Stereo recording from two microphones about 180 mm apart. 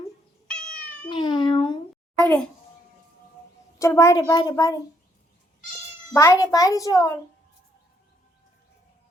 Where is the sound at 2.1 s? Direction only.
5° left (ahead or behind).